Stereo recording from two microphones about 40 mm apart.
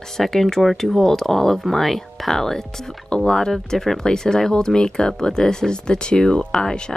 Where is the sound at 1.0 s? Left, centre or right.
Centre.